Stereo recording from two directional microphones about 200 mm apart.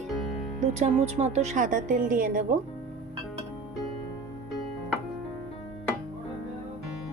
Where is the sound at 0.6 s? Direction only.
35° right (ahead or behind).